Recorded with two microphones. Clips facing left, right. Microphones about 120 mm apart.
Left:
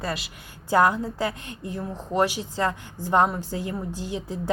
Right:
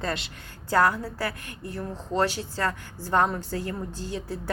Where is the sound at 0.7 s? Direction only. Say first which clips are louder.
Left 2 dB; 15° left (ahead or behind).